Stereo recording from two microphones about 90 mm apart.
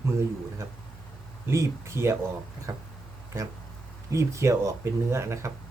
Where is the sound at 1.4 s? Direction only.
30° right (ahead or behind).